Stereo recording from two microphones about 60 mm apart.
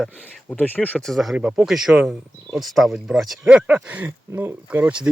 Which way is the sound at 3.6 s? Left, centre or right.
Right.